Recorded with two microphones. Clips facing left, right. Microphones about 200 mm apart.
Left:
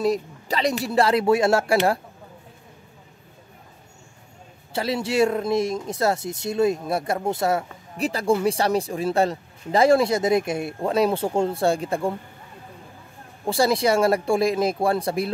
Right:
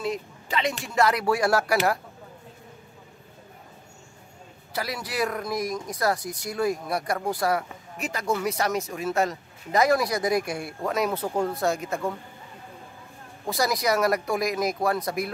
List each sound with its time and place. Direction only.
0.0 s speech: 40° left (ahead or behind)
4.7 s speech: 25° left (ahead or behind)
13.5 s speech: 30° left (ahead or behind)